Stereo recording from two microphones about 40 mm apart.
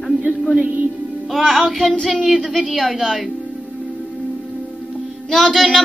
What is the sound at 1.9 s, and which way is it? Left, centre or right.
Child singing, centre.